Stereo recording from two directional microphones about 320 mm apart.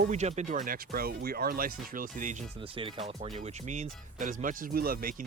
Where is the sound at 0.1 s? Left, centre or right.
Right.